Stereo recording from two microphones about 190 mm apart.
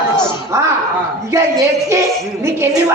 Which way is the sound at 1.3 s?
15° right (ahead or behind).